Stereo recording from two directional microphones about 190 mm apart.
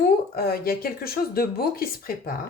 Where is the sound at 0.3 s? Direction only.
50° left (ahead or behind).